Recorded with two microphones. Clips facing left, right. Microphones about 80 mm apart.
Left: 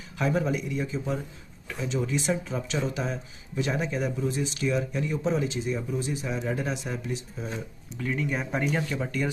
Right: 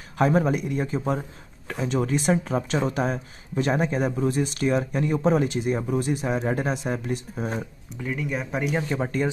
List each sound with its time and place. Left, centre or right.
0.2 s speech: right
8.0 s speech: centre
8.8 s speech: right